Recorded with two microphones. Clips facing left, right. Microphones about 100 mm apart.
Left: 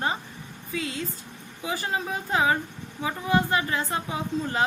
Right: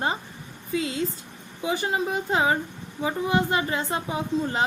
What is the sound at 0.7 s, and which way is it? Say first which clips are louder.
A woman's voice: right 5 dB; 25° right (ahead or behind).